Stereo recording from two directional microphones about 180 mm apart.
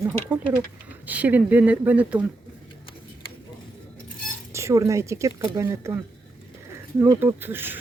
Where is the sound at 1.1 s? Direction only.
10° right (ahead or behind).